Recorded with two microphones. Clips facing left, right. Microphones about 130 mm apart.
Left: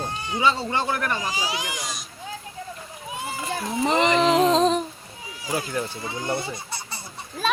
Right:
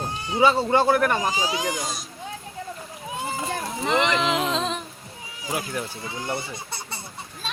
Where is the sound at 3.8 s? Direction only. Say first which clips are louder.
Left 3 dB; 40° left (ahead or behind).